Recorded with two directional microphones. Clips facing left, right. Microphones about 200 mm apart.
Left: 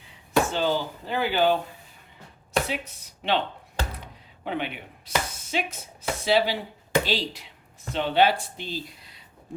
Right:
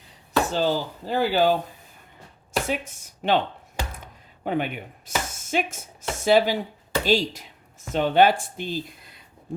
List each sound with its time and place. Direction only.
0.0 s speech: 40° right (ahead or behind)
2.6 s speech: 50° right (ahead or behind)